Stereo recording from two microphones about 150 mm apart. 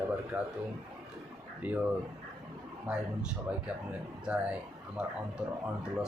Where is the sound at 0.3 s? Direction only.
15° right (ahead or behind).